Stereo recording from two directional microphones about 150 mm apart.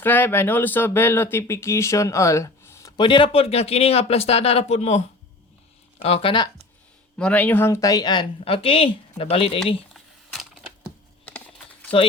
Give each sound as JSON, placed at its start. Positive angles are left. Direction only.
{"t": 0.0, "sound": "speech", "side_deg": 15}
{"t": 3.0, "sound": "a man's voice", "side_deg": 35}
{"t": 7.2, "sound": "speech", "side_deg": 10}
{"t": 9.9, "sound": "typing", "side_deg": 0}
{"t": 11.3, "sound": "typing", "side_deg": 10}